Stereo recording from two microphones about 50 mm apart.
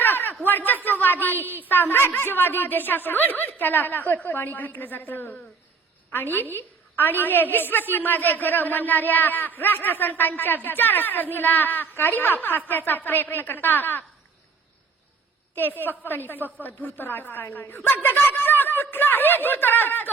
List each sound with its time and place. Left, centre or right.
0.0 s a sound: left
0.4 s a woman's voice: left
15.5 s a woman's voice: left